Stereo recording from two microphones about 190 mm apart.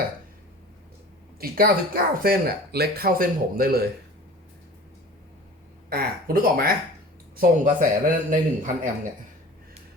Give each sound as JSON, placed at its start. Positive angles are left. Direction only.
{"t": 1.4, "sound": "speech", "side_deg": -50}
{"t": 5.9, "sound": "speech", "side_deg": -50}